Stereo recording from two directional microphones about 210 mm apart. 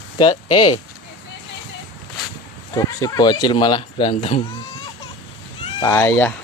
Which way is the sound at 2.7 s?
15° left (ahead or behind).